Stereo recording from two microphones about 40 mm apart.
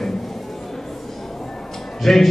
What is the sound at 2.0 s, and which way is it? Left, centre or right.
Speech, centre.